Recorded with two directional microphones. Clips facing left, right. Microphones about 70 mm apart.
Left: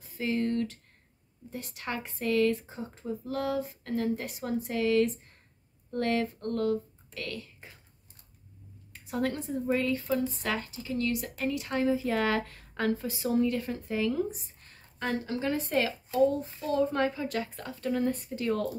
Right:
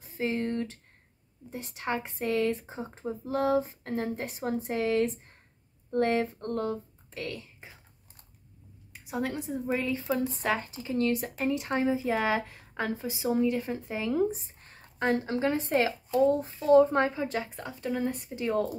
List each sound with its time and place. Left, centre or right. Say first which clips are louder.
0.0 s speech: even; right
8.9 s a woman's voice: left 1 dB; centre